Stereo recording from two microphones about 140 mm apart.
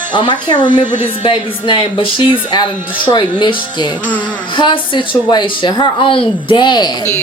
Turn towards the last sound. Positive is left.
turn(degrees=30)  # may be behind; listen again after turning